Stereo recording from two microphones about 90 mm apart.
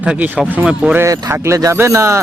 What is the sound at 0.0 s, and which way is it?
Speech, 15° right (ahead or behind).